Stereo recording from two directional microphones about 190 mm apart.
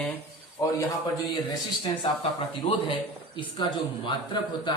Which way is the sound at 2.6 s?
25° left (ahead or behind).